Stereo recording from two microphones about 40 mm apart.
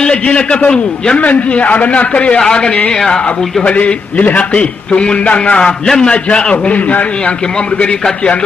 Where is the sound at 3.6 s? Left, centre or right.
Left.